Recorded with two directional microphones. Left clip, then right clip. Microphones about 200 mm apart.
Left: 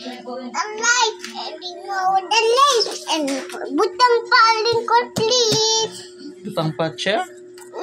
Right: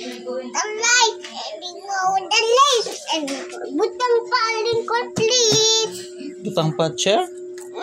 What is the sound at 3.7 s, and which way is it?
Speech, 25° left (ahead or behind).